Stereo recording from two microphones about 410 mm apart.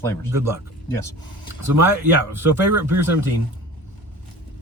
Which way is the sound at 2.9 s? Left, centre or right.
Centre.